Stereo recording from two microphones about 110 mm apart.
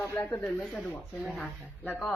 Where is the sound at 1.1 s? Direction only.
Centre (ahead or behind).